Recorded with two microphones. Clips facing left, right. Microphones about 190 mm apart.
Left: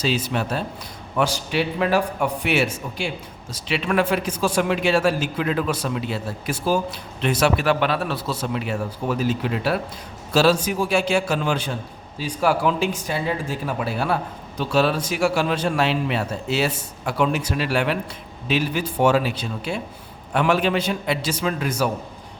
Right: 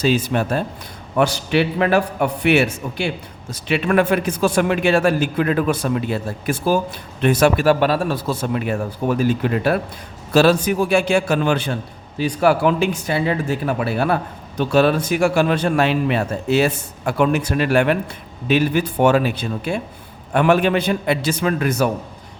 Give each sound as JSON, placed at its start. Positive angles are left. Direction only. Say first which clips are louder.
{"t": 0.0, "sound": "speech", "louder": "right 5 dB", "side_deg": -50}
{"t": 1.2, "sound": "a man's voice", "louder": "right 5 dB", "side_deg": -65}